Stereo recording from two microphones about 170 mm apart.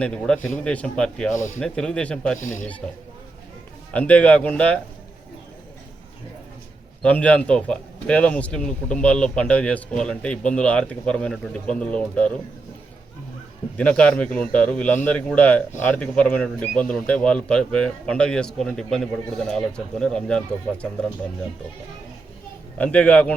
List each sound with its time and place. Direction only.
0.0 s a man's voice: 5° left (ahead or behind)
2.4 s a man's voice: 45° left (ahead or behind)
3.9 s speech: 10° left (ahead or behind)
7.0 s speech: 10° left (ahead or behind)
13.7 s a man's voice: 10° left (ahead or behind)
22.8 s speech: 10° left (ahead or behind)